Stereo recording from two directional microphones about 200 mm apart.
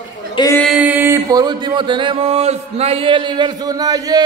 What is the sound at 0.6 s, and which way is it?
Music, centre (ahead or behind).